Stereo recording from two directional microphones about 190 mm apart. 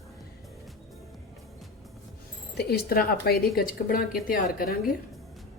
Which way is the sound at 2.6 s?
55° left (ahead or behind).